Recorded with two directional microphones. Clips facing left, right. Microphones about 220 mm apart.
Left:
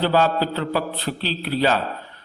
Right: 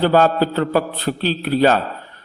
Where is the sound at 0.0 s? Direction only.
50° right (ahead or behind).